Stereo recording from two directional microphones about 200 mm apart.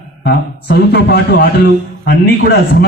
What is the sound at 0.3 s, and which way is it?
A man's voice, 55° left (ahead or behind).